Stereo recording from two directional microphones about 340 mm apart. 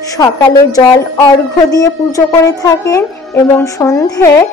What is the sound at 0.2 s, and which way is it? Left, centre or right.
A woman's voice, centre.